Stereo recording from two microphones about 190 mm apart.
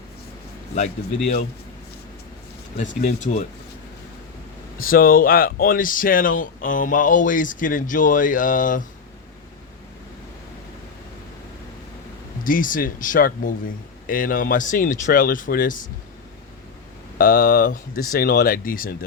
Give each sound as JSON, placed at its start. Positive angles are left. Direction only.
{"t": 2.7, "sound": "speech", "side_deg": 40}
{"t": 4.8, "sound": "speech", "side_deg": 50}
{"t": 12.5, "sound": "speech", "side_deg": 45}
{"t": 17.2, "sound": "speech", "side_deg": 50}